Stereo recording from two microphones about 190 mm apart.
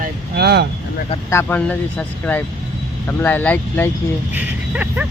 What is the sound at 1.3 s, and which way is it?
Speech, 10° left (ahead or behind).